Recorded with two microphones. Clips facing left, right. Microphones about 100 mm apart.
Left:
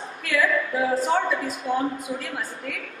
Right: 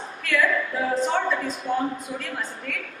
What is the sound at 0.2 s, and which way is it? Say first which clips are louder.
A woman's voice: even; 5° left (ahead or behind).